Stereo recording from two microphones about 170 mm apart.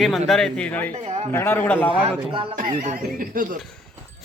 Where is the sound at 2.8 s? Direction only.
50° right (ahead or behind).